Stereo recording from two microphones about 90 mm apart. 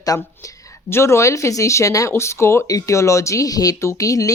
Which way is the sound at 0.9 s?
30° left (ahead or behind).